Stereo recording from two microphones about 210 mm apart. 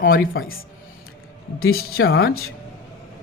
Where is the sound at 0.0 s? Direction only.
45° left (ahead or behind).